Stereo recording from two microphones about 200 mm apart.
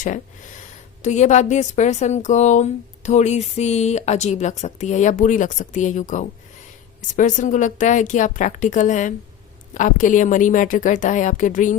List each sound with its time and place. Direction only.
0.0 s a woman's voice: 40° left (ahead or behind)